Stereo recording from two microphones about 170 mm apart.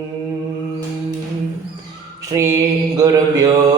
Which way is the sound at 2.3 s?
20° right (ahead or behind).